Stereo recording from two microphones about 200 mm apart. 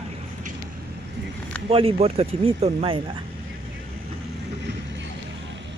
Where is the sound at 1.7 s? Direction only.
30° right (ahead or behind).